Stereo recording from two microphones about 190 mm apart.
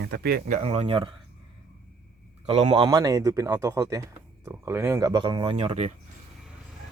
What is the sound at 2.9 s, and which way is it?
Speech, 15° right (ahead or behind).